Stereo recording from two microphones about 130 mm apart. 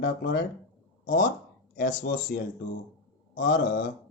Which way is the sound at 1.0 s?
90° left.